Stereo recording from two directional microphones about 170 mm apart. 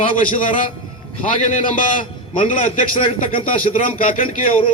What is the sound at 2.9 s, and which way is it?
Speech, 30° left (ahead or behind).